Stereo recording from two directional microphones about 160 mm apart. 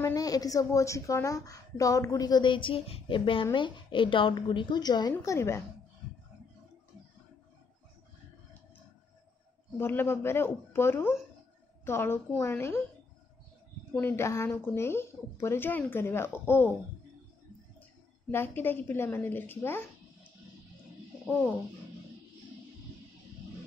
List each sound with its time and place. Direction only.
0.0 s a woman's voice: 25° left (ahead or behind)
9.8 s a woman's voice: 15° left (ahead or behind)
13.9 s a woman's voice: 15° left (ahead or behind)
18.3 s a woman's voice: 15° left (ahead or behind)